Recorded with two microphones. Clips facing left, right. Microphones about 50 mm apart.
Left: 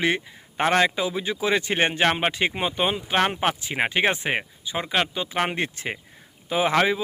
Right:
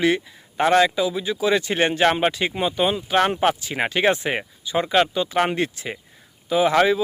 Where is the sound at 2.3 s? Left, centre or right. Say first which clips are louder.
Right 2 dB; left.